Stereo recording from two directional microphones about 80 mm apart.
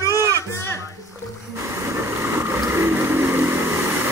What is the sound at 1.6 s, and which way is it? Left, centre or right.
Vehicle, right.